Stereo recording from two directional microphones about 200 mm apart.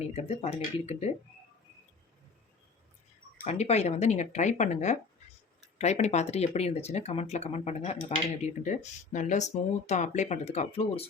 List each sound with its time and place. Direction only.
0.0 s speech: 30° left (ahead or behind)
3.3 s speech: 35° left (ahead or behind)